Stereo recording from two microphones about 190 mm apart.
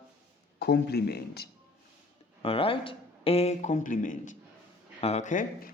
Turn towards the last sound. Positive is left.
turn(degrees=40)  # may be behind; listen again after turning